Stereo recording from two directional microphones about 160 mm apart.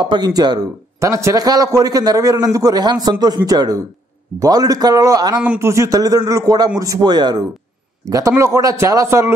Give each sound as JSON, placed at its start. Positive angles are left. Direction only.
{"t": 0.0, "sound": "a man's voice", "side_deg": -25}
{"t": 5.4, "sound": "a man's voice", "side_deg": -10}